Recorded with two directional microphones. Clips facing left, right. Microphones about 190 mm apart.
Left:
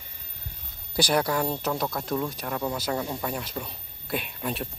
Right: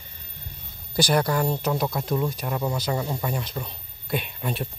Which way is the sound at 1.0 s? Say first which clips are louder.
Right 2 dB; centre (ahead or behind).